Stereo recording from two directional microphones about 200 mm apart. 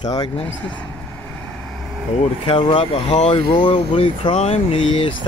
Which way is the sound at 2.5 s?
25° left (ahead or behind).